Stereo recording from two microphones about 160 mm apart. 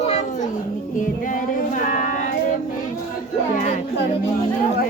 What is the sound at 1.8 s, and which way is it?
Music, 50° left (ahead or behind).